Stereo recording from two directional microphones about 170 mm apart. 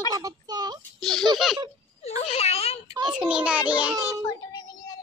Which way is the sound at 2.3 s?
35° left (ahead or behind).